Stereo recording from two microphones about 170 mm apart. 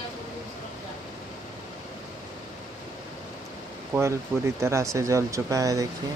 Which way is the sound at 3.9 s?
15° right (ahead or behind).